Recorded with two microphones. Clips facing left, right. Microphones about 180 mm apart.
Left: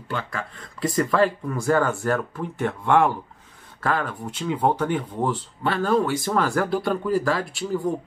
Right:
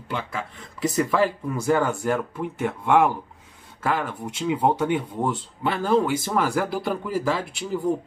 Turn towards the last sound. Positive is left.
turn(degrees=-15)  # may be behind; listen again after turning